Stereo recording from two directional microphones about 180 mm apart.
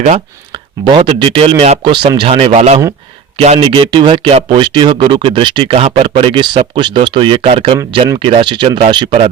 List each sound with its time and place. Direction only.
0.5 s speech: 30° right (ahead or behind)
7.9 s speech: 20° right (ahead or behind)
8.2 s speech: 30° right (ahead or behind)